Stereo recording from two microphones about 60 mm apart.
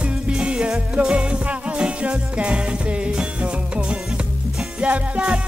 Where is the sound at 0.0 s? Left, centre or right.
Centre.